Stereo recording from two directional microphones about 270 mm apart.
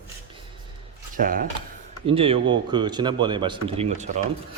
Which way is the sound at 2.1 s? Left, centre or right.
Centre.